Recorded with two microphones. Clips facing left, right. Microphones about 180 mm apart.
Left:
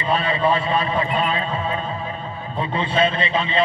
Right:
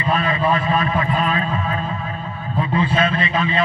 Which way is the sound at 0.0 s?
30° left (ahead or behind).